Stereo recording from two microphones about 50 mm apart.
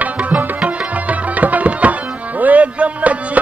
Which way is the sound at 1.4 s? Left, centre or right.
Right.